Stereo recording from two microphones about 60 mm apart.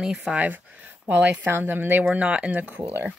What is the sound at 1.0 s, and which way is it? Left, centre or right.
Speech, right.